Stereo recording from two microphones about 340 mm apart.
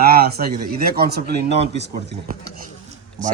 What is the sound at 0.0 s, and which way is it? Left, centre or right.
Speech, right.